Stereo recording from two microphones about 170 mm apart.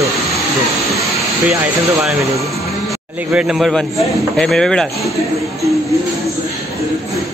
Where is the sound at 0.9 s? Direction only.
20° right (ahead or behind).